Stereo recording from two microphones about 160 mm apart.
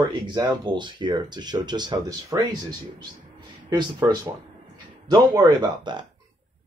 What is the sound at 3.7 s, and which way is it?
Speech, 25° right (ahead or behind).